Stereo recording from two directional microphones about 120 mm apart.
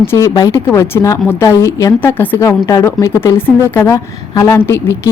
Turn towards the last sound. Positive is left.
turn(degrees=20)  # may be behind; listen again after turning